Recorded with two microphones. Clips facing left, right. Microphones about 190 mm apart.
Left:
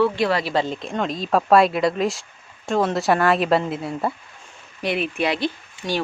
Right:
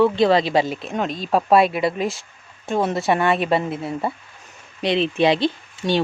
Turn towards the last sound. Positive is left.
turn(degrees=-25)  # may be behind; listen again after turning